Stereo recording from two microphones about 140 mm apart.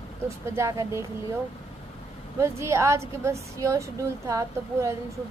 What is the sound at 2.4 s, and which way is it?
A woman's voice, 20° right (ahead or behind).